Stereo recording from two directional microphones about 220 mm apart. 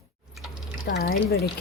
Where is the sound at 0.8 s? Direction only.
45° left (ahead or behind).